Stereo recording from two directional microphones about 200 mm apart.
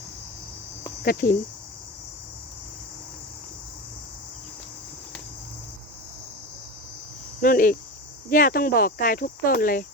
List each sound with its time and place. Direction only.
1.0 s speech: 45° left (ahead or behind)
7.4 s speech: 45° left (ahead or behind)